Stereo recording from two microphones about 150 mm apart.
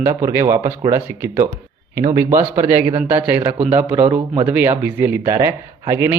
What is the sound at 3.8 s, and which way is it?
Speech, 10° right (ahead or behind).